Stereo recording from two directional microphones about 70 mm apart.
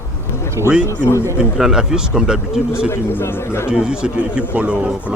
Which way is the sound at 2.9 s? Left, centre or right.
Left.